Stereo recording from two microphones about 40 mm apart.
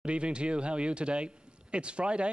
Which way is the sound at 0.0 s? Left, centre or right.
Right.